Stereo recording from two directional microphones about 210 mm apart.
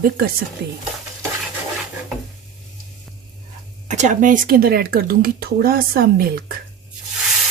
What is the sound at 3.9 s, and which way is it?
Speech, 35° right (ahead or behind).